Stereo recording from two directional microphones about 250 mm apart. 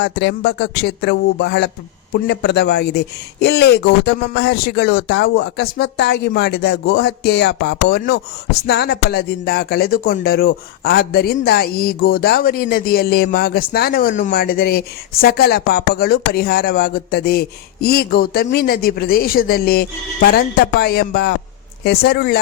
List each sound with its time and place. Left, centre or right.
0.0 s speech: left